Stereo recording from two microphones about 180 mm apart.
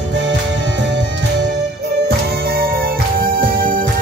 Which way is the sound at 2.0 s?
55° right (ahead or behind).